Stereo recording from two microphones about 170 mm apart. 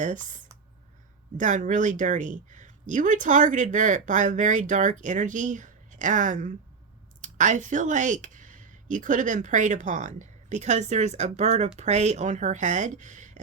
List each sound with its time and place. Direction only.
0.0 s speech: 45° right (ahead or behind)